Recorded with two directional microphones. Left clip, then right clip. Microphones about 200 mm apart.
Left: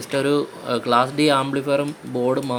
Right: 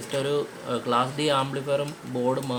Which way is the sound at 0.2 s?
30° left (ahead or behind).